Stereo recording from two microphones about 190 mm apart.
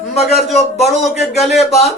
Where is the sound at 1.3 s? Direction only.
Centre (ahead or behind).